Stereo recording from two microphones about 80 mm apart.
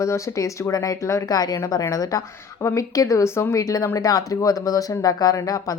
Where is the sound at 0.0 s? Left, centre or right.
Left.